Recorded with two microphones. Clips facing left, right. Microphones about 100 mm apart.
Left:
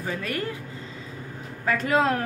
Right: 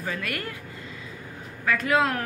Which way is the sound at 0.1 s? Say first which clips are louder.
Left 4 dB; 25° left (ahead or behind).